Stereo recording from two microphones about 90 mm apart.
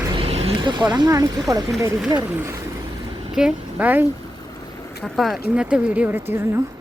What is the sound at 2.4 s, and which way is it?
Speech, 35° right (ahead or behind).